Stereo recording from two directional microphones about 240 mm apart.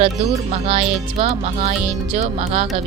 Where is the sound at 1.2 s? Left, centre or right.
Right.